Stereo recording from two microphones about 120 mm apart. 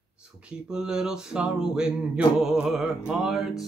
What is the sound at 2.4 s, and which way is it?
Music, 5° right (ahead or behind).